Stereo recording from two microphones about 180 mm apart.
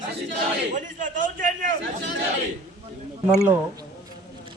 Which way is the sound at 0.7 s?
45° right (ahead or behind).